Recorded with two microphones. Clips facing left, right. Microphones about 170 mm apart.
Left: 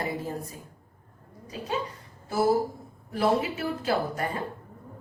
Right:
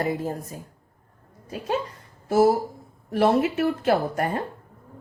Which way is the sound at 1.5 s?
50° right (ahead or behind).